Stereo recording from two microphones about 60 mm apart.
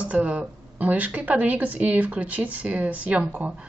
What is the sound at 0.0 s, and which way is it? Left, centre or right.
A woman's voice, right.